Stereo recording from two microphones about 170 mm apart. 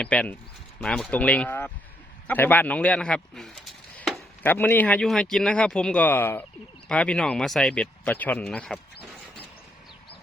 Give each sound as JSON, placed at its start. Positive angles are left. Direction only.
{"t": 0.0, "sound": "speech", "side_deg": 5}
{"t": 4.4, "sound": "speech", "side_deg": 10}